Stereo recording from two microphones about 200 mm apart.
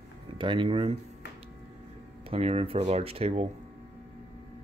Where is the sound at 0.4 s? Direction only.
25° right (ahead or behind).